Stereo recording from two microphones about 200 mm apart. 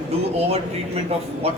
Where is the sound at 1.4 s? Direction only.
30° right (ahead or behind).